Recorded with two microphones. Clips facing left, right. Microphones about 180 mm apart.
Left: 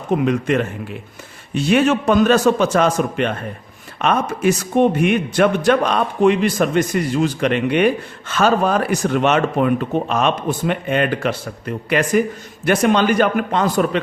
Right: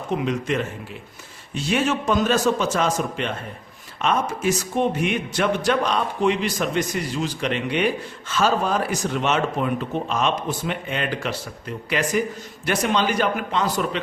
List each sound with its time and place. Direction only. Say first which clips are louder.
0.1 s a man's voice: left 6 dB; 55° left (ahead or behind)